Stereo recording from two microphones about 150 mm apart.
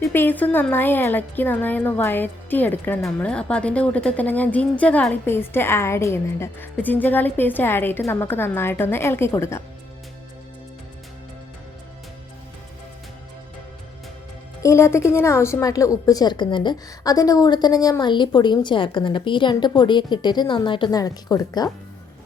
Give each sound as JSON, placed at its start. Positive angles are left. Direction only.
{"t": 0.1, "sound": "speech", "side_deg": 15}
{"t": 14.6, "sound": "a woman's voice", "side_deg": 20}